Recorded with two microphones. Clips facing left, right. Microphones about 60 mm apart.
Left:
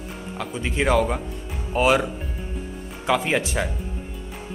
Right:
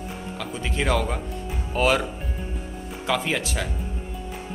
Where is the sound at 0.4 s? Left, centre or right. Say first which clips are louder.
Left 3 dB; centre.